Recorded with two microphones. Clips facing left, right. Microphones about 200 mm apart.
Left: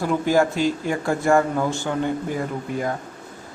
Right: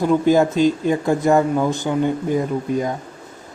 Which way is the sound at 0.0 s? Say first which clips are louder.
Right 4 dB; 20° right (ahead or behind).